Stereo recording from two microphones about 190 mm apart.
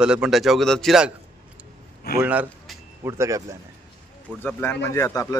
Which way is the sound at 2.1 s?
10° right (ahead or behind).